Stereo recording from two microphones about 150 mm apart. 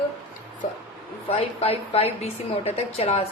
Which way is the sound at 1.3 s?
40° left (ahead or behind).